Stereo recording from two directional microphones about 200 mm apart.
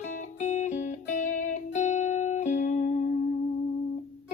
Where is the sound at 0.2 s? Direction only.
40° left (ahead or behind).